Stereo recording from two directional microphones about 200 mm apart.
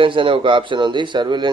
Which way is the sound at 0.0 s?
25° right (ahead or behind).